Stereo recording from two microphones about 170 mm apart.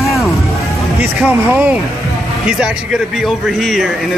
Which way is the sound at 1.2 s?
10° right (ahead or behind).